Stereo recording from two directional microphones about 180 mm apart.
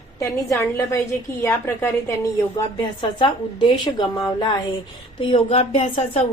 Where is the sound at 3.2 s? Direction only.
25° left (ahead or behind).